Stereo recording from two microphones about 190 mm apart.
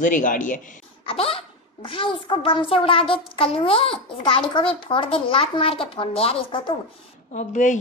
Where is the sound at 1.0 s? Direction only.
30° left (ahead or behind).